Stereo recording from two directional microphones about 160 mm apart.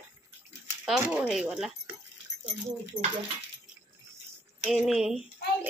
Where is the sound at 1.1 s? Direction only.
5° right (ahead or behind).